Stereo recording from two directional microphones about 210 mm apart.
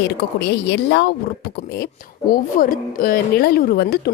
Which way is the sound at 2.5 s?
40° left (ahead or behind).